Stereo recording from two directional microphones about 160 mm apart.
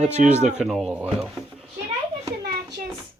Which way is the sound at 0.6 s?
Centre (ahead or behind).